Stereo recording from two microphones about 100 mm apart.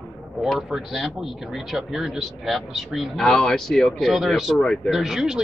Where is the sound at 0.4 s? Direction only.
5° right (ahead or behind).